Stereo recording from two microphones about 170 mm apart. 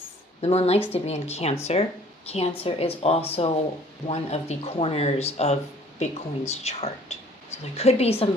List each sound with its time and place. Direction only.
0.4 s speech: 40° left (ahead or behind)